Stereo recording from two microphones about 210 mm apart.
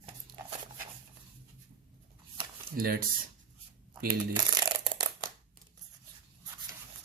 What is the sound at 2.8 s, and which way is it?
Speech, 40° right (ahead or behind).